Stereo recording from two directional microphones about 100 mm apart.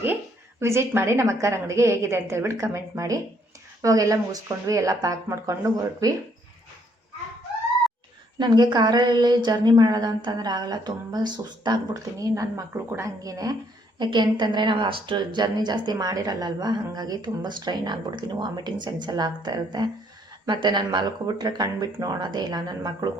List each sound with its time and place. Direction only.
0.6 s a woman's voice: 25° right (ahead or behind)
8.4 s a woman's voice: 45° right (ahead or behind)
12.2 s speech: 35° right (ahead or behind)
14.0 s a woman's voice: 50° right (ahead or behind)